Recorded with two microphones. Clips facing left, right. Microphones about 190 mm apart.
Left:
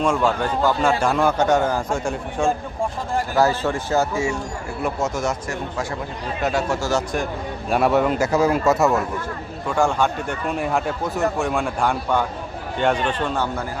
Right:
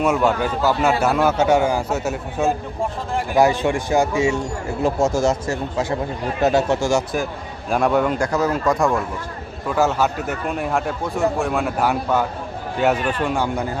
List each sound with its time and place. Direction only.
0.0 s a man's voice: 5° right (ahead or behind)
4.8 s speech: 30° right (ahead or behind)
6.9 s a man's voice: 5° right (ahead or behind)